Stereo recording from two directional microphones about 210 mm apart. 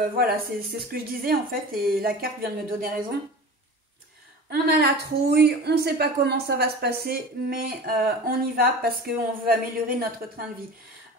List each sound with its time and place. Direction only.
0.2 s a woman's voice: 45° right (ahead or behind)
4.5 s a woman's voice: 50° right (ahead or behind)